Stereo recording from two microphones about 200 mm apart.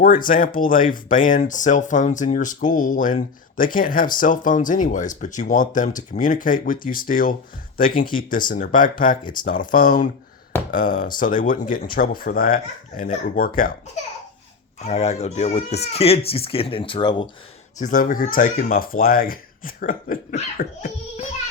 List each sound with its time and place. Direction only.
0.0 s speech: 45° left (ahead or behind)
14.8 s speech: 35° left (ahead or behind)
17.7 s speech: 40° left (ahead or behind)